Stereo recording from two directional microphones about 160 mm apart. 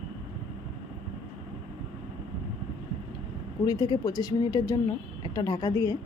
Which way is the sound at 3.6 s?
25° left (ahead or behind).